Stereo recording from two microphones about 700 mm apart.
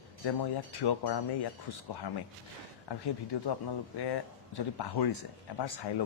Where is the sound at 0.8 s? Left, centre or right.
Left.